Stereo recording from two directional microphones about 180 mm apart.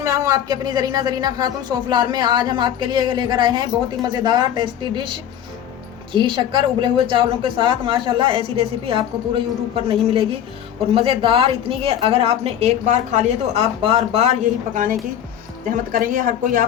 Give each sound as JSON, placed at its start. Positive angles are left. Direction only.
{"t": 0.0, "sound": "a woman's voice", "side_deg": -20}
{"t": 6.1, "sound": "a woman's voice", "side_deg": -25}
{"t": 15.9, "sound": "speech", "side_deg": -50}